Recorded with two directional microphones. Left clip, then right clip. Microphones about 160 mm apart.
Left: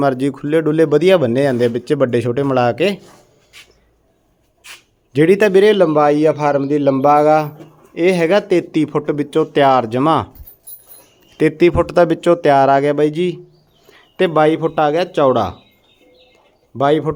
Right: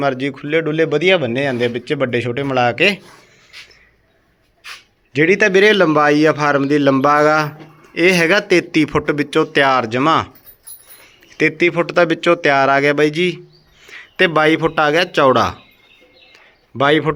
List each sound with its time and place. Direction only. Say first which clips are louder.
0.0 s speech: left 2 dB; 45° left (ahead or behind)
2.7 s speech: right 2 dB; 15° left (ahead or behind)
5.1 s speech: left 1 dB; 30° left (ahead or behind)
5.6 s a man's voice: even; 5° left (ahead or behind); by 10.3 s 25° left (ahead or behind)
11.3 s a man's voice: left 2 dB; 30° left (ahead or behind); by 15.5 s 5° left (ahead or behind)
16.3 s a sound: right 2 dB; 5° left (ahead or behind)